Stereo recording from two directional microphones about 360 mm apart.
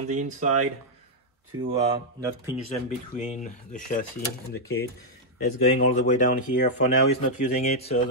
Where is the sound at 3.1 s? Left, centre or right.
Centre.